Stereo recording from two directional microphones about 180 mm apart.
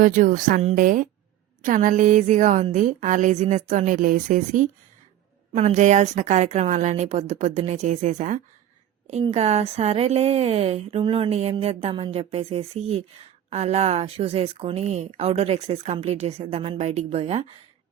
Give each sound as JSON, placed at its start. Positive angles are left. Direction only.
{"t": 0.0, "sound": "a woman's voice", "side_deg": -50}